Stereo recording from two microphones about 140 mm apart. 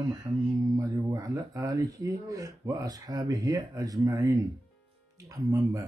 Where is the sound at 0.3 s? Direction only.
20° right (ahead or behind).